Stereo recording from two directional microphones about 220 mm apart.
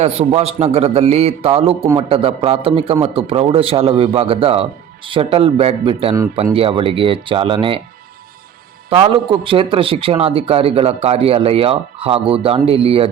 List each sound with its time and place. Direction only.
0.0 s a man's voice: 25° right (ahead or behind)
8.9 s a man's voice: 25° right (ahead or behind)